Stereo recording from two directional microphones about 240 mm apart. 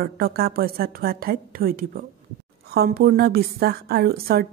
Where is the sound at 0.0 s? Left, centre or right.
Right.